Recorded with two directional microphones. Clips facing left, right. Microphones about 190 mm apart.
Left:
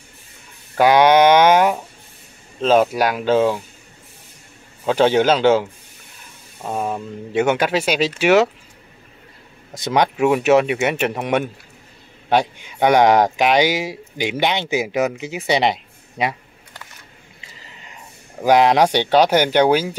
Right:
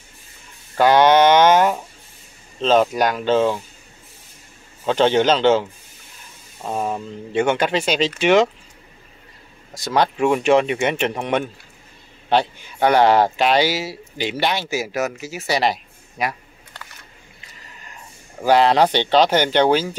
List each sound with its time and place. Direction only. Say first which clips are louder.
0.7 s a sound: left 1 dB; 10° left (ahead or behind)
2.6 s speech: left 1 dB; 10° left (ahead or behind)
4.8 s speech: left 1 dB; 10° left (ahead or behind)
9.8 s speech: left 1 dB; 20° left (ahead or behind)
10.1 s speech: left 2 dB; 5° left (ahead or behind); by 16.3 s 25° left (ahead or behind)
18.4 s speech: left 1 dB; 15° left (ahead or behind)